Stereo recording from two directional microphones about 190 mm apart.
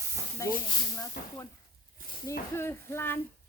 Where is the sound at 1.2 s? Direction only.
50° left (ahead or behind).